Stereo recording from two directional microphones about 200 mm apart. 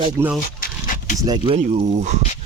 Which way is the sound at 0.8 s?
40° left (ahead or behind).